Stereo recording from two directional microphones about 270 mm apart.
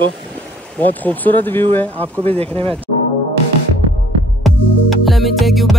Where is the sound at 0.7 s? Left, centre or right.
Centre.